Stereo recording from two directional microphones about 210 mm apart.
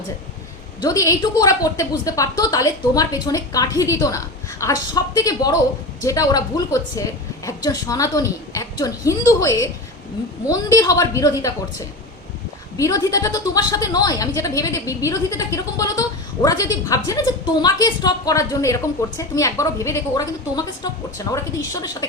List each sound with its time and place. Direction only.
0.8 s a woman's voice: 15° left (ahead or behind)
12.7 s a woman's voice: 15° left (ahead or behind)